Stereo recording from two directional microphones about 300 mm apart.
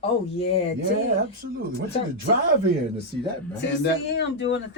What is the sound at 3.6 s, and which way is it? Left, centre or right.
Speech, left.